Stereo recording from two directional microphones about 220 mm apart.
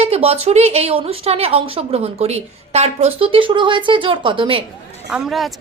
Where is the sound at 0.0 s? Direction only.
25° right (ahead or behind).